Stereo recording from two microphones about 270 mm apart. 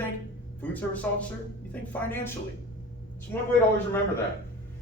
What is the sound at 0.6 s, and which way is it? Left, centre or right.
A man's voice, centre.